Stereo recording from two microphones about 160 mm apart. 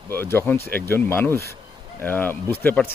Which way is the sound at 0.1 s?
15° left (ahead or behind).